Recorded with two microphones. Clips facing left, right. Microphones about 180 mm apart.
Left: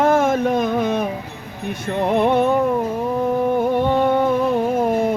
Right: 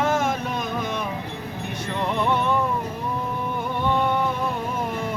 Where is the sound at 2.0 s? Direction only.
50° left (ahead or behind).